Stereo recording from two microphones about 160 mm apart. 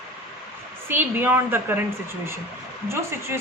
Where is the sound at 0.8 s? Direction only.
15° right (ahead or behind).